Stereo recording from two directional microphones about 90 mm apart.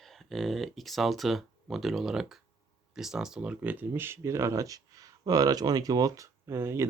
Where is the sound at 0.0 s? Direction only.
Centre (ahead or behind).